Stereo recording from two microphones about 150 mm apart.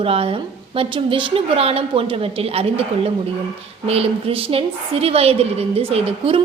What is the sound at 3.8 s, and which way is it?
A woman's voice, 40° right (ahead or behind).